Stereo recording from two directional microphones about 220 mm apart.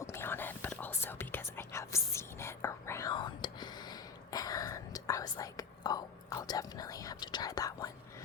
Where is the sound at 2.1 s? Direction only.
10° left (ahead or behind).